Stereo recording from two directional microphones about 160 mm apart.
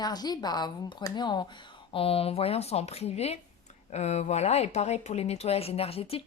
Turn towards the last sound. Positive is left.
turn(degrees=35)  # may be behind; listen again after turning